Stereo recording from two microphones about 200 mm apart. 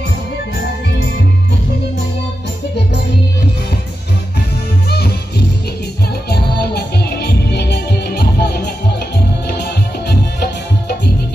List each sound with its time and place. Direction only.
4.8 s music: 50° left (ahead or behind)
6.3 s music: 55° left (ahead or behind)